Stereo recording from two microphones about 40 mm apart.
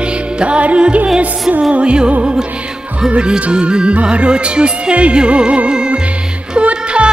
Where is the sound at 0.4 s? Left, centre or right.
Right.